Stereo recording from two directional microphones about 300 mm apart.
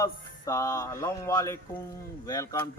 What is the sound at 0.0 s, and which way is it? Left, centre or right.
Speech, centre.